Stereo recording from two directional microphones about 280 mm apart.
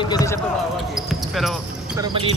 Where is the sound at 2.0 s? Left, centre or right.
Centre.